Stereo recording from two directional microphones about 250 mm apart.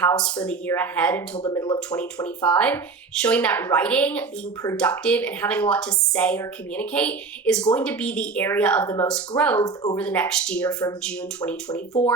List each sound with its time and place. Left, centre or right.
0.0 s speech: centre
1.9 s speech: centre